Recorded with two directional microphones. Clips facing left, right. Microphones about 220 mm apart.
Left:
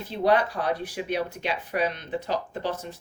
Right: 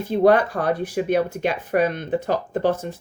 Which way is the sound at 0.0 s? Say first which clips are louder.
Right 6 dB; 50° right (ahead or behind).